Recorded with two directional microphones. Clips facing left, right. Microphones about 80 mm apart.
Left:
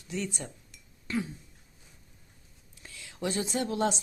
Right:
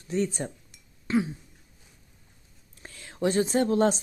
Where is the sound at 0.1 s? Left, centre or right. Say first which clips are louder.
Right 8 dB; right.